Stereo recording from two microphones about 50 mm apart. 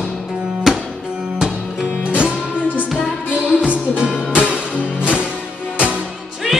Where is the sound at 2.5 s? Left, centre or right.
Left.